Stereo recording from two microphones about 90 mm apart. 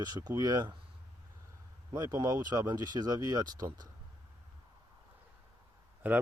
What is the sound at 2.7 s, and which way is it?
Speech, 45° right (ahead or behind).